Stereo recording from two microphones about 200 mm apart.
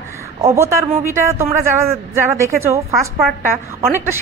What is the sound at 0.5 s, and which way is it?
Speech, 15° right (ahead or behind).